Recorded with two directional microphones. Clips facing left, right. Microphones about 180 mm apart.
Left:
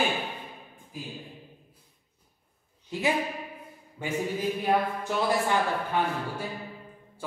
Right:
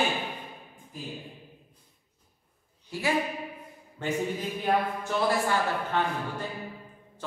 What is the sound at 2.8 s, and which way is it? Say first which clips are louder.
A woman's voice: left 1 dB; 20° left (ahead or behind).